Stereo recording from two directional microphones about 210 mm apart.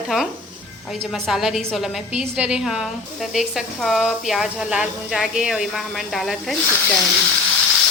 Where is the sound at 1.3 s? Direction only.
Centre (ahead or behind).